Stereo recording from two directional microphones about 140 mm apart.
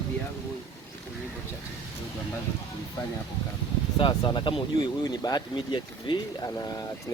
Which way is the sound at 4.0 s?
35° left (ahead or behind).